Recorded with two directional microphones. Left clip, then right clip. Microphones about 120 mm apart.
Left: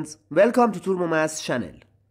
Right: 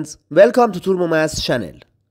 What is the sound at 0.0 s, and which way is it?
Speech, 40° right (ahead or behind).